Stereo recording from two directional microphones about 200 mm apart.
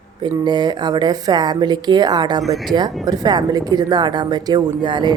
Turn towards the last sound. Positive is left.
turn(degrees=-25)  # may be behind; listen again after turning